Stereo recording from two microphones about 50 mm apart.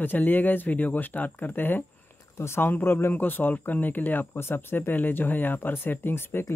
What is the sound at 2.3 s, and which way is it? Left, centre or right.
Speech, left.